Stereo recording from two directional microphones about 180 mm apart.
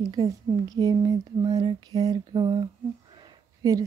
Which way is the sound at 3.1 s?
20° right (ahead or behind).